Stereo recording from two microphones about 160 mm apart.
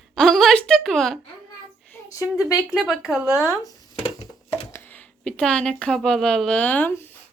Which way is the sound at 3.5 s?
20° left (ahead or behind).